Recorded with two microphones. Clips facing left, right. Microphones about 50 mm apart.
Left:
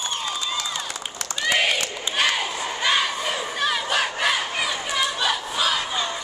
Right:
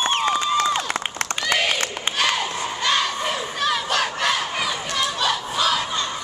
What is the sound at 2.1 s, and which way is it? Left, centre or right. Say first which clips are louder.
Crowd: even; centre.